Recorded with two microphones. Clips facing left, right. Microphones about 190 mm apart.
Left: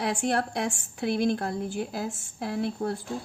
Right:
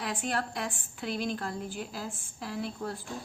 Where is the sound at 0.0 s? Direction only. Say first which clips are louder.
Left 6 dB; 70° left (ahead or behind).